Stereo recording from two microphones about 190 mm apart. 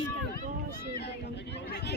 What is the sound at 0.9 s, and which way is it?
Speech, 60° left (ahead or behind).